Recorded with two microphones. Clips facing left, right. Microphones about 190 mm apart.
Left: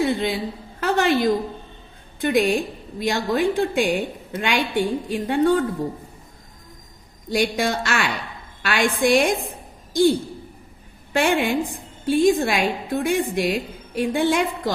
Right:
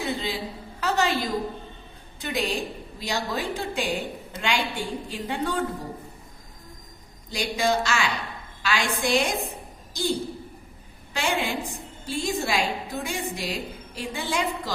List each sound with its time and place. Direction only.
0.0 s a woman's voice: 55° left (ahead or behind)
7.3 s a woman's voice: 55° left (ahead or behind)